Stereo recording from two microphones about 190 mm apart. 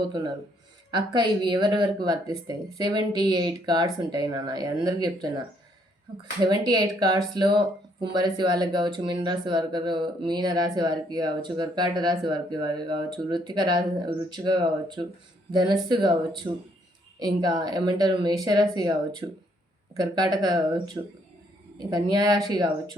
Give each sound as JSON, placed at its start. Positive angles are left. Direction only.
{"t": 0.9, "sound": "speech", "side_deg": -25}
{"t": 6.4, "sound": "speech", "side_deg": -20}